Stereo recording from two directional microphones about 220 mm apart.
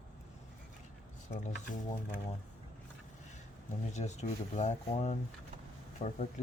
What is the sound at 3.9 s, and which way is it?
Speech, 30° left (ahead or behind).